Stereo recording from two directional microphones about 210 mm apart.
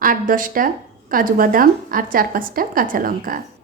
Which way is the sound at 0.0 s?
40° right (ahead or behind).